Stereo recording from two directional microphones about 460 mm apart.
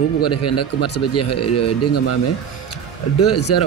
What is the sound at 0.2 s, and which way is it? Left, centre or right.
Speech, left.